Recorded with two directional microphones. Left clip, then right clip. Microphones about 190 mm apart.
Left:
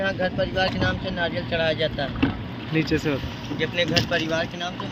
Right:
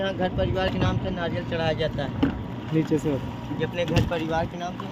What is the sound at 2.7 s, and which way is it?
Speech, 20° right (ahead or behind).